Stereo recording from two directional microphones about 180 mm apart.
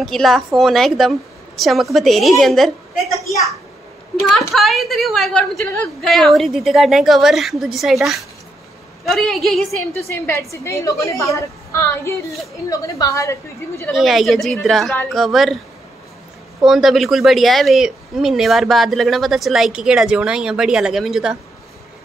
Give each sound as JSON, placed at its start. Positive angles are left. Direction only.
{"t": 0.0, "sound": "speech", "side_deg": 0}
{"t": 10.3, "sound": "a woman's voice", "side_deg": 15}
{"t": 13.9, "sound": "speech", "side_deg": 0}
{"t": 16.6, "sound": "speech", "side_deg": 0}